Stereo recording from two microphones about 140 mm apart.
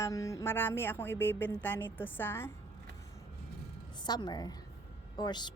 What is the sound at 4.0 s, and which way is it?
A woman's voice, 30° left (ahead or behind).